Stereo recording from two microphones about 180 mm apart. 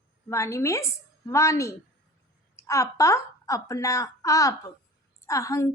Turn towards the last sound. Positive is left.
turn(degrees=20)  # may be behind; listen again after turning